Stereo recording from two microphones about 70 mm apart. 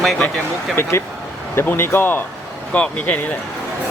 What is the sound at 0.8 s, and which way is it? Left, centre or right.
Speech, left.